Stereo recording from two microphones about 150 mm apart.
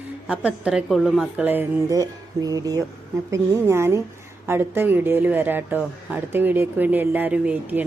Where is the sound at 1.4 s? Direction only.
10° right (ahead or behind).